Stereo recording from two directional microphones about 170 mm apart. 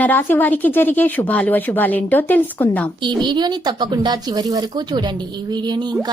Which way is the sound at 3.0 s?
25° right (ahead or behind).